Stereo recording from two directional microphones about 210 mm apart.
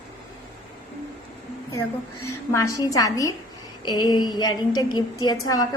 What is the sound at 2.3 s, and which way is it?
A woman's voice, 15° left (ahead or behind).